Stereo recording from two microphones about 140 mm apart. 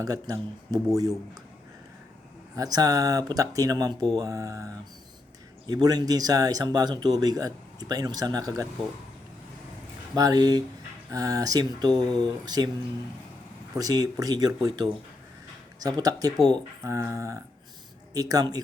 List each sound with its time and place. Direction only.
0.0 s speech: 25° right (ahead or behind)
2.6 s speech: 25° right (ahead or behind)
10.2 s speech: 25° right (ahead or behind)
13.7 s speech: 25° right (ahead or behind)